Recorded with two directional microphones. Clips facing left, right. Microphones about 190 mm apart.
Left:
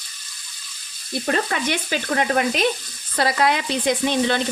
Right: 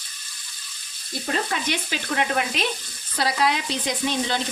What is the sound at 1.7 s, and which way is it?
Stir, 45° left (ahead or behind).